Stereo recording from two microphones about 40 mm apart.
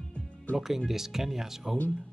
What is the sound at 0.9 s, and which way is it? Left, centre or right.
Speech, centre.